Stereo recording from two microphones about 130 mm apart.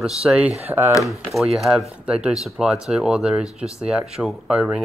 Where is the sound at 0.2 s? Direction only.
10° right (ahead or behind).